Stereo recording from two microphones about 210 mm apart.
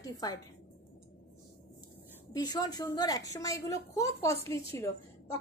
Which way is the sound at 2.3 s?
20° left (ahead or behind).